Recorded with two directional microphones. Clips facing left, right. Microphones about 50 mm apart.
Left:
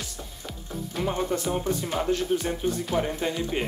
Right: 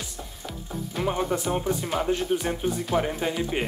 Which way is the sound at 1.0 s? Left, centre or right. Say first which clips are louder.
Right 1 dB; centre.